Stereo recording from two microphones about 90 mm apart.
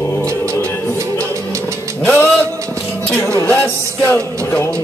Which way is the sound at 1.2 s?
35° right (ahead or behind).